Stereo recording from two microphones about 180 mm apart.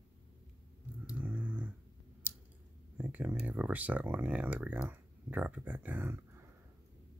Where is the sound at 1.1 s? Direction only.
10° right (ahead or behind).